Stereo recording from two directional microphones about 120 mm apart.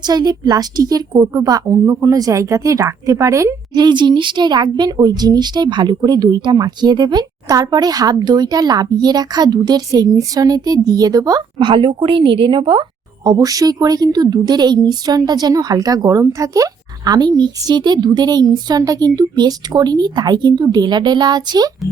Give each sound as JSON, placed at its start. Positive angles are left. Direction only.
{"t": 0.0, "sound": "speech", "side_deg": -35}
{"t": 13.2, "sound": "speech", "side_deg": -30}